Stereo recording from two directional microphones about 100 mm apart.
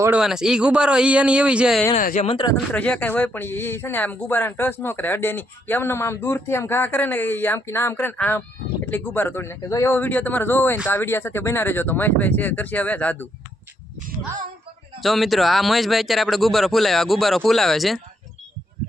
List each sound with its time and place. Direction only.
0.1 s speech: 5° right (ahead or behind)
1.9 s speech: 60° left (ahead or behind)
2.7 s speech: 15° left (ahead or behind); by 10.0 s 30° left (ahead or behind)
10.0 s speech: 20° left (ahead or behind)
15.0 s a man's voice: centre (ahead or behind)